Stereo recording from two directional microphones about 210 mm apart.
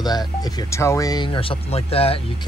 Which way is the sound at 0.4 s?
20° left (ahead or behind).